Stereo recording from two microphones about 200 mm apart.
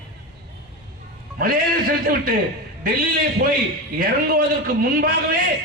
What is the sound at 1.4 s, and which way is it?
A man's voice, 45° right (ahead or behind).